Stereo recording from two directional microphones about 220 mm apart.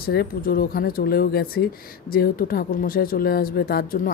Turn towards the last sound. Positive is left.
turn(degrees=40)  # may be behind; listen again after turning